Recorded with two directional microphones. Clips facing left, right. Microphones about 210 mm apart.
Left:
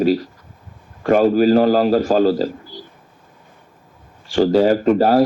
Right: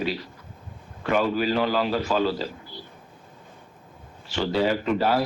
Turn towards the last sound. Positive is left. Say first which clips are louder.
# left 9 dB
turn(degrees=40)  # may be behind; listen again after turning